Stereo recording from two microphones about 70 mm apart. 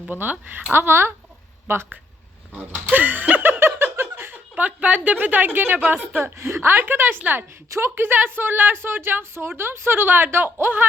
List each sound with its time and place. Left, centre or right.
0.1 s a woman's voice: right
2.9 s a sound: right
3.8 s a woman's voice: right